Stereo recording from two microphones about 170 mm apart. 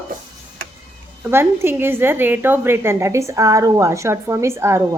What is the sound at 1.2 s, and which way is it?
A woman's voice, 15° right (ahead or behind).